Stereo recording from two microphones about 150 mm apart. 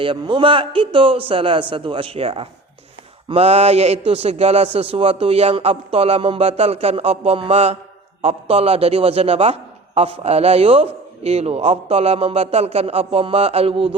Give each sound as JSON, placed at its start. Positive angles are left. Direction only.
{"t": 0.0, "sound": "a man's voice", "side_deg": -35}